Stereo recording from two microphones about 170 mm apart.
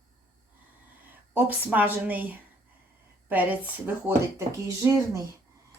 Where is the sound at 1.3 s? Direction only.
10° right (ahead or behind).